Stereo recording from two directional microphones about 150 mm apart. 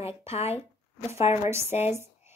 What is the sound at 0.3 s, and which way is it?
A woman's voice, 45° left (ahead or behind).